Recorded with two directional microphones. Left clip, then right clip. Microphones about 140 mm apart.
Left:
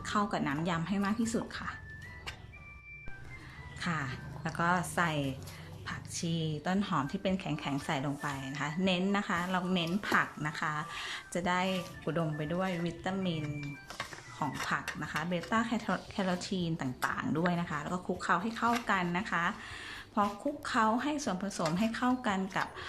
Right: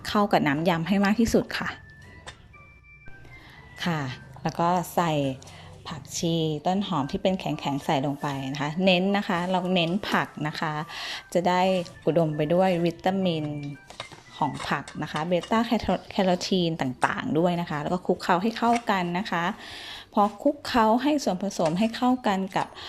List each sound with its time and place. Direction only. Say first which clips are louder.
0.0 s speech: right 10 dB; 35° right (ahead or behind)
3.8 s a woman's voice: right 6 dB; 40° right (ahead or behind)
14.3 s a woman's voice: right 7 dB; 35° right (ahead or behind)
17.3 s a woman's voice: right 8 dB; 25° right (ahead or behind)